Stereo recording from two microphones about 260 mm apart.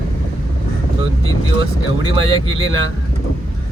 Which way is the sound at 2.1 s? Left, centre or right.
Right.